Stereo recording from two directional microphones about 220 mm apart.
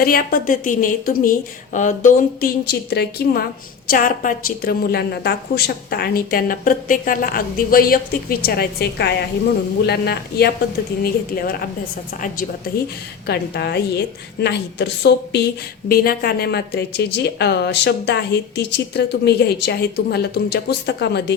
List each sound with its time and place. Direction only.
0.0 s a woman's voice: 40° left (ahead or behind)